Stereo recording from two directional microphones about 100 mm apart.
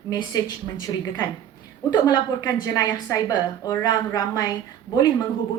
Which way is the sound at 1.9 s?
40° left (ahead or behind).